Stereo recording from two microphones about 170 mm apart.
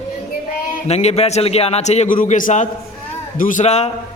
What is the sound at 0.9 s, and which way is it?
A man's voice, 40° left (ahead or behind).